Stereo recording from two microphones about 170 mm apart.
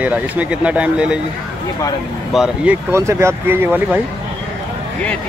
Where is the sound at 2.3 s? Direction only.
5° right (ahead or behind).